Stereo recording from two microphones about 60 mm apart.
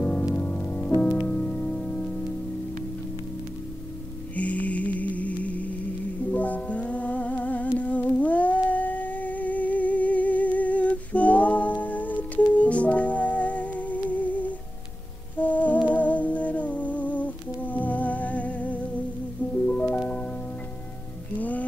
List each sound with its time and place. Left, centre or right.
0.4 s music: left
4.4 s music: left
7.8 s humming: left
19.5 s music: left
21.4 s music: left